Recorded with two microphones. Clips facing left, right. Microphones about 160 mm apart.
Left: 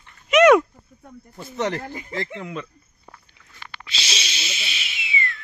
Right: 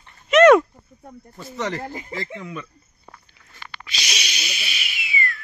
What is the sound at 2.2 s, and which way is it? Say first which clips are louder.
Speech: left 4 dB; 70° left (ahead or behind).